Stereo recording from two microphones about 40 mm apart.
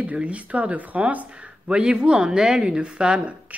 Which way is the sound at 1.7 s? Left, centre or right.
Right.